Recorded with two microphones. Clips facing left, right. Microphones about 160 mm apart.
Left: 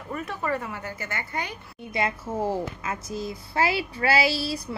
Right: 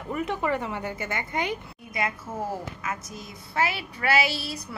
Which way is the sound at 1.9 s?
30° left (ahead or behind).